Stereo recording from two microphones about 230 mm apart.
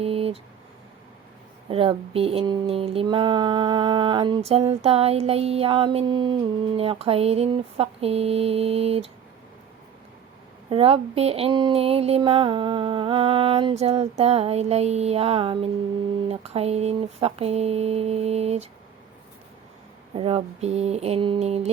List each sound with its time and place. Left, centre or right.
0.0 s speech: right
1.7 s speech: right
10.7 s speech: right
20.1 s speech: right